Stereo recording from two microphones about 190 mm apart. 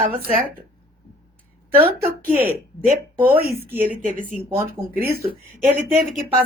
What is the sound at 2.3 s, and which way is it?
A woman's voice, 10° right (ahead or behind).